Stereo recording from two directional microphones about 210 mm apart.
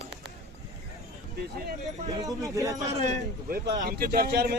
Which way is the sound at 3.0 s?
40° right (ahead or behind).